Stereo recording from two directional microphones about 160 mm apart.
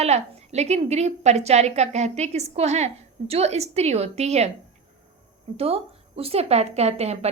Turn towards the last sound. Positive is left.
turn(degrees=-40)  # may be behind; listen again after turning